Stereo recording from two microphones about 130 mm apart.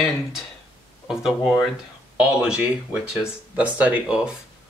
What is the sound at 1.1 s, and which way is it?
Speech, 5° right (ahead or behind).